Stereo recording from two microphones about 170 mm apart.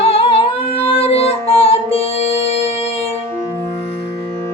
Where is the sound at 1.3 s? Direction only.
35° left (ahead or behind).